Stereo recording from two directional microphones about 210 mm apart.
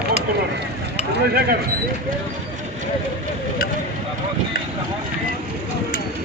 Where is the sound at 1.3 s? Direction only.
45° right (ahead or behind).